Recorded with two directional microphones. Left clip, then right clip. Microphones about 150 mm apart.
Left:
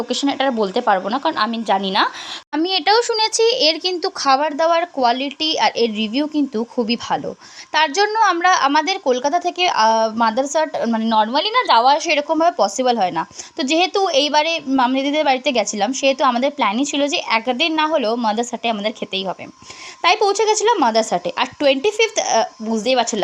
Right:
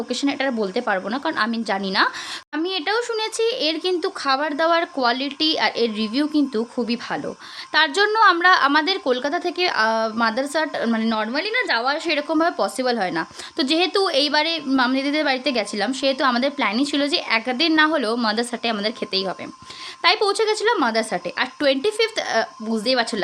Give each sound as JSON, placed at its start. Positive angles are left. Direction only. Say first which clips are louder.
{"t": 0.1, "sound": "a woman's voice", "louder": "left 4 dB", "side_deg": 10}
{"t": 2.5, "sound": "a woman's voice", "louder": "left 7 dB", "side_deg": 35}